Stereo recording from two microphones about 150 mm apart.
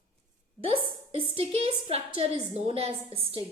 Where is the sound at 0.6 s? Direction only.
35° right (ahead or behind).